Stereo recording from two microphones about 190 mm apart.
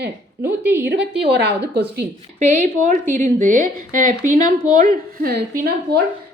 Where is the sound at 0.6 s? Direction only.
10° right (ahead or behind).